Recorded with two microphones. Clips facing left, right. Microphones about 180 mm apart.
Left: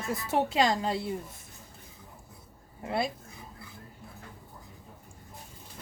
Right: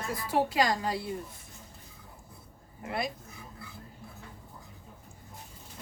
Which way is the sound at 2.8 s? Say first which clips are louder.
Left 3 dB; 30° left (ahead or behind).